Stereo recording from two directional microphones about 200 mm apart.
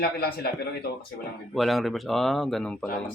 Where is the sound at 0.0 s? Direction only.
50° left (ahead or behind).